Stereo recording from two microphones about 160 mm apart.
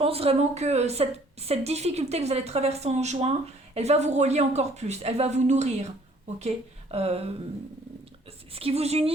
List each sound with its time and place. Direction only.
0.0 s a woman's voice: 35° right (ahead or behind)
6.9 s a woman's voice: 40° right (ahead or behind)
8.5 s a woman's voice: 40° right (ahead or behind)